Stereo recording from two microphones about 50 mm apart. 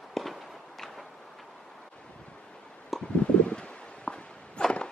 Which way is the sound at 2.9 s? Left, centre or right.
Centre.